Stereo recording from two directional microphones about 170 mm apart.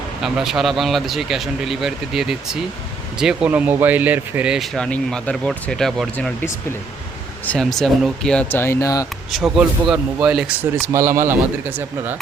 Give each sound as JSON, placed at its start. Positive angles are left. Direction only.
{"t": 0.2, "sound": "speech", "side_deg": 0}
{"t": 7.4, "sound": "speech", "side_deg": 5}
{"t": 9.3, "sound": "speech", "side_deg": 0}
{"t": 10.9, "sound": "speech", "side_deg": -15}